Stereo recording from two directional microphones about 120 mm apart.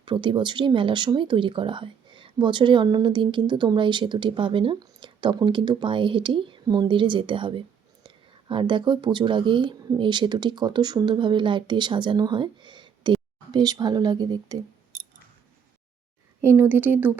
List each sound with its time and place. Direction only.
0.0 s speech: 45° right (ahead or behind)
16.4 s speech: 20° right (ahead or behind)